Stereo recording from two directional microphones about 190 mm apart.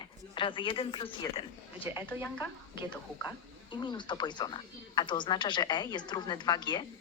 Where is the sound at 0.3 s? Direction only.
25° left (ahead or behind).